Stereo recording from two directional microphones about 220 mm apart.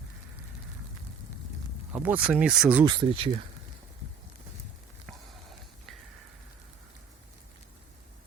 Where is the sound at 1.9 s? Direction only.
5° right (ahead or behind).